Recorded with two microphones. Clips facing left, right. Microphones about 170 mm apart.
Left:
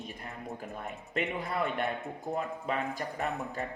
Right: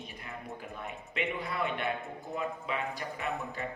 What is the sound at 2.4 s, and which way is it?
Speech, 45° left (ahead or behind).